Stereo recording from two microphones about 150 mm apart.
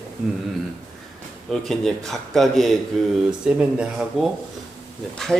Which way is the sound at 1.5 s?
5° left (ahead or behind).